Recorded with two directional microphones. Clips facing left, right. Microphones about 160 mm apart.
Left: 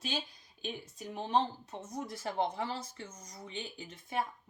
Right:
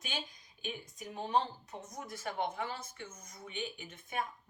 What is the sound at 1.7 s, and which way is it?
Speech, 30° left (ahead or behind).